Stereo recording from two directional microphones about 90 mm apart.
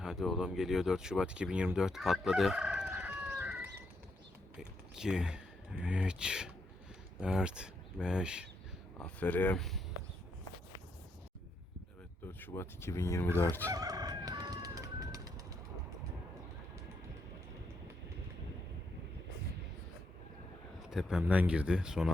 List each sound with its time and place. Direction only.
0.0 s speech: 5° right (ahead or behind)
2.6 s crowing: 20° right (ahead or behind)
4.5 s a man's voice: 5° right (ahead or behind)
9.0 s speech: 15° left (ahead or behind)
9.6 s speech: centre (ahead or behind)
12.4 s speech: 25° left (ahead or behind)
13.7 s chicken: 45° right (ahead or behind)
20.7 s a man's voice: 5° right (ahead or behind)